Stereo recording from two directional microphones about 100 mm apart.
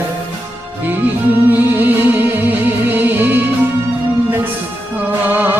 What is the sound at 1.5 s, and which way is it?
Music, 20° right (ahead or behind).